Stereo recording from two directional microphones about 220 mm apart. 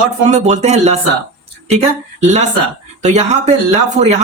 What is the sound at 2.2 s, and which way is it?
Speech, 30° right (ahead or behind).